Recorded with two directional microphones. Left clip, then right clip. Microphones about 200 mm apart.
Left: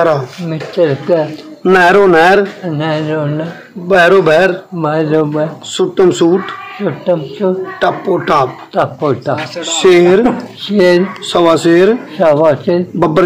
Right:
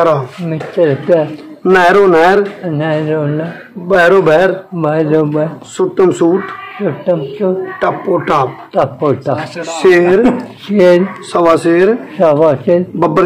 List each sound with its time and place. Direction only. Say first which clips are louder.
0.5 s speech: right 1 dB; 5° right (ahead or behind)
1.6 s a man's voice: even; 15° left (ahead or behind)
2.6 s speech: right 1 dB; 5° right (ahead or behind)
3.9 s a man's voice: even; 10° left (ahead or behind)
4.7 s speech: right 2 dB; 10° right (ahead or behind)
5.8 s a man's voice: left 1 dB; 10° left (ahead or behind)
6.8 s speech: even; 5° right (ahead or behind)
7.8 s a man's voice: left 1 dB; 10° left (ahead or behind)
8.7 s speech: right 1 dB; 5° right (ahead or behind)
9.8 s speech: left 1 dB; 20° left (ahead or behind)
10.7 s speech: right 1 dB; 5° right (ahead or behind)
11.3 s a man's voice: left 1 dB; 20° left (ahead or behind)
12.2 s speech: even; 5° right (ahead or behind)